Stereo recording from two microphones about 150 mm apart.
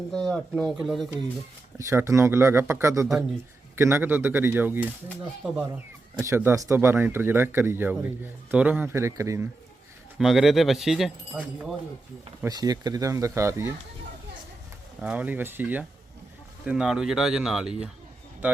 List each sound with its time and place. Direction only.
0.1 s speech: 5° left (ahead or behind)
1.8 s speech: 20° right (ahead or behind)
10.2 s speech: centre (ahead or behind)
12.5 s speech: 25° right (ahead or behind)
15.0 s speech: 10° right (ahead or behind)